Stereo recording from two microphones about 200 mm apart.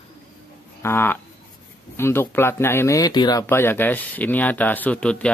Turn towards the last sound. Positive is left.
turn(degrees=5)  # may be behind; listen again after turning